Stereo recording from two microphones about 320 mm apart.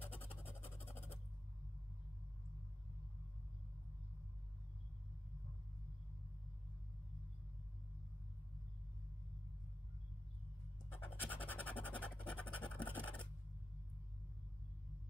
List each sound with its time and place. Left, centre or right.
0.0 s music: centre
11.0 s scratch: centre